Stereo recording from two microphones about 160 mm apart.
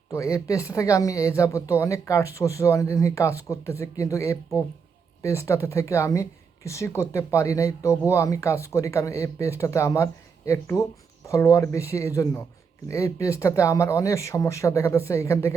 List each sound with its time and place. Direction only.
0.1 s speech: 20° left (ahead or behind)